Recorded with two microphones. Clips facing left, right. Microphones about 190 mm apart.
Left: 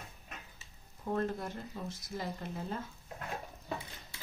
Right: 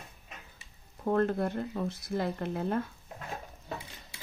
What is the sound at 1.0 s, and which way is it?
Speech, 60° right (ahead or behind).